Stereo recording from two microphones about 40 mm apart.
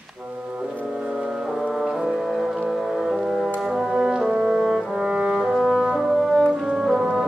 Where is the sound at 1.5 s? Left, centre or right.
Centre.